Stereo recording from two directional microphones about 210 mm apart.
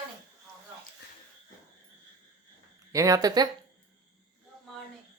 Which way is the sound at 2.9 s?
15° right (ahead or behind).